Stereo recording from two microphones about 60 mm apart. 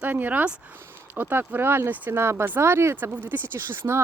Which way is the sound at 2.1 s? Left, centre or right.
Right.